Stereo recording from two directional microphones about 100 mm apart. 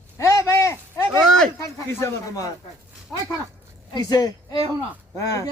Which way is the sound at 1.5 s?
30° left (ahead or behind).